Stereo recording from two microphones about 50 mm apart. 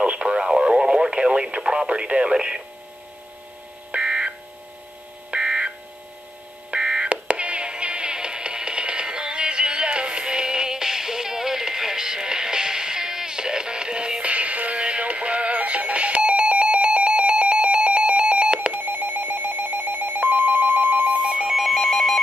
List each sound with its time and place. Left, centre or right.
0.0 s speech: right
3.9 s buzzer: right
5.3 s buzzer: centre
6.7 s telephone dialing: centre
18.7 s telephone: right
21.2 s alarm clock: centre
21.5 s alarm: centre